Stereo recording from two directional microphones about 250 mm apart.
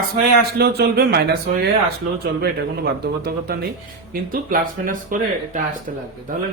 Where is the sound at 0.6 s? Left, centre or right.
Right.